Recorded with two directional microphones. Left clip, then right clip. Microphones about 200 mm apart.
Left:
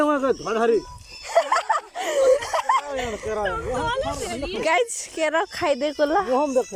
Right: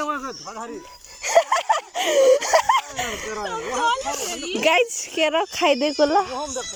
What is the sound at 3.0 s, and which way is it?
Speech, 15° right (ahead or behind).